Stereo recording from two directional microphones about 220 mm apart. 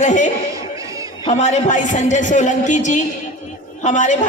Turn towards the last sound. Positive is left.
turn(degrees=35)  # may be behind; listen again after turning